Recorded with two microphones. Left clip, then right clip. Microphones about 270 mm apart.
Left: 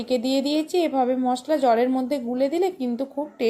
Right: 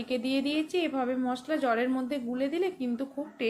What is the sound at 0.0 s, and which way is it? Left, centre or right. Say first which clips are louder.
Speech: left 7 dB; centre.